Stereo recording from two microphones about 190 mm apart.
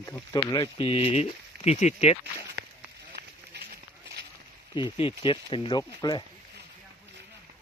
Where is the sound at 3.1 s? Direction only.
60° right (ahead or behind).